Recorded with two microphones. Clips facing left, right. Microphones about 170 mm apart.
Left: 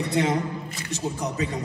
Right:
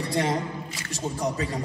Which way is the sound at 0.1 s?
35° right (ahead or behind).